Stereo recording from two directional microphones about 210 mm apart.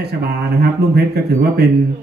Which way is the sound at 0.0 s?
50° right (ahead or behind).